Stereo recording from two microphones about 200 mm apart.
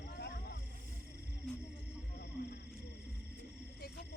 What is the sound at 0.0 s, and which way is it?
Vehicle, 55° left (ahead or behind).